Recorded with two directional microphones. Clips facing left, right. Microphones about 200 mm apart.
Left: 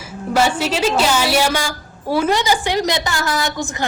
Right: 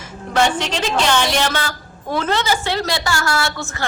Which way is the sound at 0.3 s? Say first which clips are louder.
Left 1 dB; 5° left (ahead or behind).